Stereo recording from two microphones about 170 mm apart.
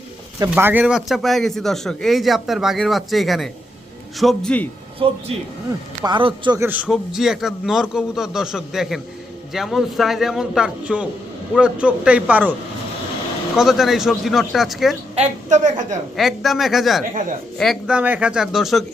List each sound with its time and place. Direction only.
0.5 s a man's voice: 10° right (ahead or behind); by 4.7 s 5° left (ahead or behind)
5.0 s a man's voice: 30° right (ahead or behind)
6.6 s a man's voice: 10° right (ahead or behind)
13.6 s a man's voice: centre (ahead or behind)
15.1 s a woman's voice: 45° right (ahead or behind)
16.1 s a man's voice: centre (ahead or behind)
17.0 s a woman's voice: 50° right (ahead or behind)
17.6 s a man's voice: 5° right (ahead or behind)